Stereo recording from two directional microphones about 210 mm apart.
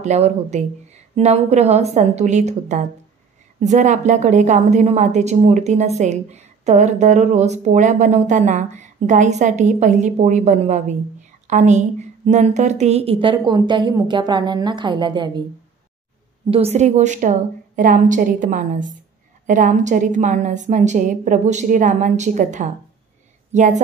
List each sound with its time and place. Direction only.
0.0 s a woman's voice: 30° right (ahead or behind)
16.4 s a woman's voice: 25° right (ahead or behind)